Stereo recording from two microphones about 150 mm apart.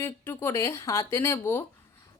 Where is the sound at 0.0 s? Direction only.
15° left (ahead or behind).